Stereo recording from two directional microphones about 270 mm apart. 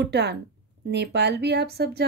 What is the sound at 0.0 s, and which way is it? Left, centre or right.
Speech, right.